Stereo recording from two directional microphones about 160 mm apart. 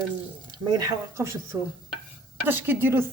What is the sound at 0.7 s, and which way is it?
A woman's voice, 20° right (ahead or behind).